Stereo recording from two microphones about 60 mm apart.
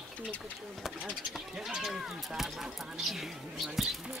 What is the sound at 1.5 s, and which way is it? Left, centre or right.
Speech, centre.